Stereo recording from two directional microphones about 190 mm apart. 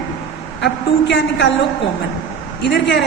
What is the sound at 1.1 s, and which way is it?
Speech, 65° left (ahead or behind).